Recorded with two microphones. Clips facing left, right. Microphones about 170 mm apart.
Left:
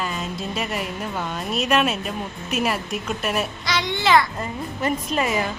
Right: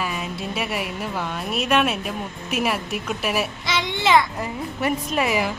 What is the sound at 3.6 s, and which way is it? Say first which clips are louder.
Speech: left 1 dB; 20° right (ahead or behind).